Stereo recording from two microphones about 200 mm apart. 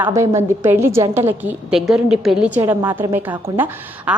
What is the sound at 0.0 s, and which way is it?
A woman's voice, 15° right (ahead or behind).